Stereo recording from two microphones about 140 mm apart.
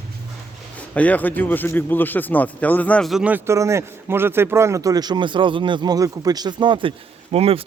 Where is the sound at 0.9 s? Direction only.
10° left (ahead or behind).